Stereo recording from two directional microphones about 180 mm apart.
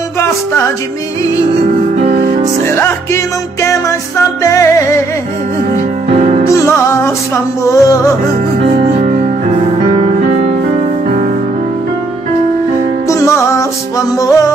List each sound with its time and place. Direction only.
2.7 s music: 15° left (ahead or behind)
4.4 s music: 15° left (ahead or behind)
6.4 s music: 15° left (ahead or behind)
13.1 s music: 15° left (ahead or behind)